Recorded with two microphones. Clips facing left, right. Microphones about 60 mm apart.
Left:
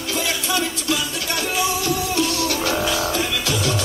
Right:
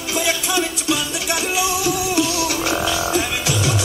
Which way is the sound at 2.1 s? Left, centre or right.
Centre.